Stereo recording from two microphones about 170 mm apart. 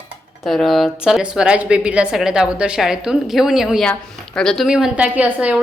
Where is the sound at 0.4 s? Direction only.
Centre (ahead or behind).